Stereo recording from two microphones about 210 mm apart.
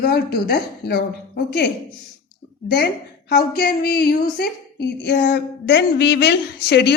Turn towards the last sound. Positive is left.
turn(degrees=50)  # may be behind; listen again after turning